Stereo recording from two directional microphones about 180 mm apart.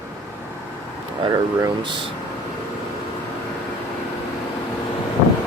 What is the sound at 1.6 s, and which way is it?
Speech, 25° right (ahead or behind).